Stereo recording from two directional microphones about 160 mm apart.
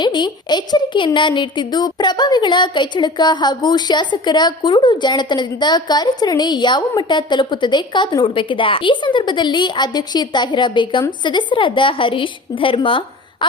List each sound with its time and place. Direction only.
0.0 s a woman's voice: 25° left (ahead or behind)